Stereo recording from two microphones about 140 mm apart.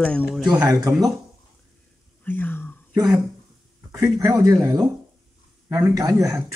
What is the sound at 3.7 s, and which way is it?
Speech, 20° right (ahead or behind).